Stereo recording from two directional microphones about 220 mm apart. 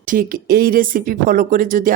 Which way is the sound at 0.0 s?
40° right (ahead or behind).